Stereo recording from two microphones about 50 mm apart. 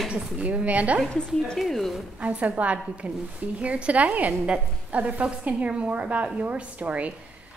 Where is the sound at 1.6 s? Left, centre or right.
Centre.